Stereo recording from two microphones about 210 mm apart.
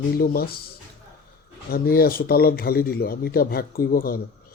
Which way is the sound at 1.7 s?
45° left (ahead or behind).